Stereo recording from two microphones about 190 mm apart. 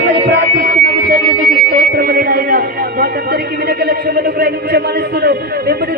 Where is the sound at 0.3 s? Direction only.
55° right (ahead or behind).